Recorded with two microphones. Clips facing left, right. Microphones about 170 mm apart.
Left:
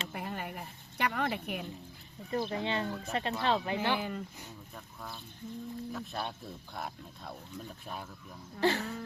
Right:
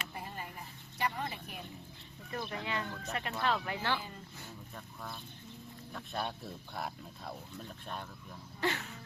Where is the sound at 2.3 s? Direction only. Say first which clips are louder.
Left 6 dB; 25° left (ahead or behind).